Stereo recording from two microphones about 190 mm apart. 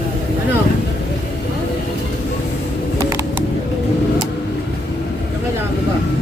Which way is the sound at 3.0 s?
15° right (ahead or behind).